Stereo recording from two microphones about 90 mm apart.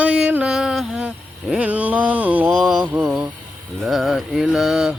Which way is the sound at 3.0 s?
5° right (ahead or behind).